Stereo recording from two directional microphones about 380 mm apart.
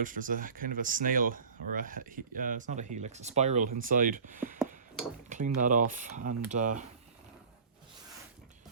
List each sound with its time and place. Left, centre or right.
0.0 s speech: right